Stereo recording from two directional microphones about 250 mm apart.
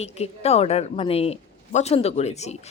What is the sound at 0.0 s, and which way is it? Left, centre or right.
A woman's voice, left.